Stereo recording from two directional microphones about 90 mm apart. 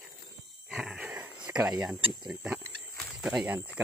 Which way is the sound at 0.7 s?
10° right (ahead or behind).